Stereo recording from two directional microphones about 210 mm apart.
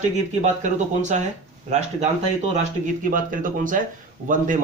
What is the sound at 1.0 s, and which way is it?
Speech, 35° right (ahead or behind).